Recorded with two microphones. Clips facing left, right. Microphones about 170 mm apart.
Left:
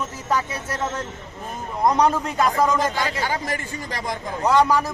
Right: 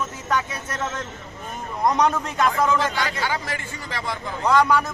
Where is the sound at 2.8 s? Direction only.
40° left (ahead or behind).